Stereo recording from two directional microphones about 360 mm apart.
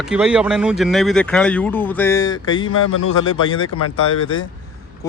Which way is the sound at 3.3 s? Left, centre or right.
Centre.